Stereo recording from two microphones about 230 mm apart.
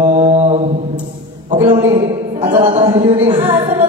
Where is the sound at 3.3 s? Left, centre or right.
Right.